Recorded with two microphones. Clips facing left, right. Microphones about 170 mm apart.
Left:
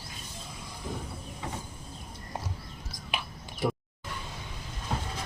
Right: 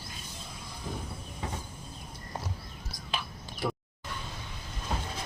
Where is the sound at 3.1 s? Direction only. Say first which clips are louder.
Even; 20° left (ahead or behind).